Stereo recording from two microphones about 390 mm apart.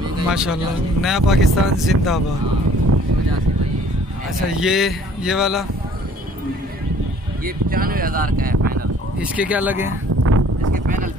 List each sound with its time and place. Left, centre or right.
0.3 s speech: centre
4.6 s speech: centre
7.4 s speech: right
9.2 s speech: centre
10.2 s a sound: right